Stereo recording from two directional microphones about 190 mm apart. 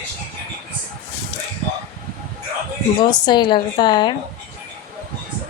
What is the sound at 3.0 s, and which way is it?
A woman's voice, 20° left (ahead or behind).